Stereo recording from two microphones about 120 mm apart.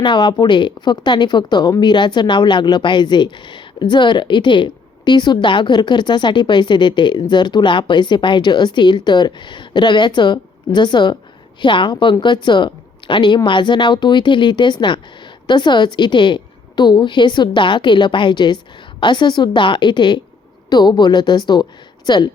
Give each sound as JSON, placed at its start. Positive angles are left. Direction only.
{"t": 0.0, "sound": "a woman's voice", "side_deg": 40}